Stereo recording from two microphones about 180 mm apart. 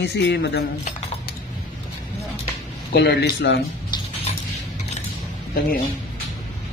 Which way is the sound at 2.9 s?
65° left (ahead or behind).